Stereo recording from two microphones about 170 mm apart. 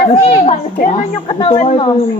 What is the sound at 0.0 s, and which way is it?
Speech, 30° left (ahead or behind).